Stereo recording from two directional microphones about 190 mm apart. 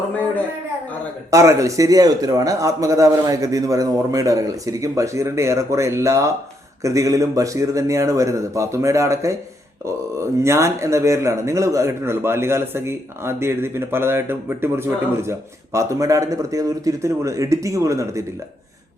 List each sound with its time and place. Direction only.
1.3 s speech: 15° right (ahead or behind)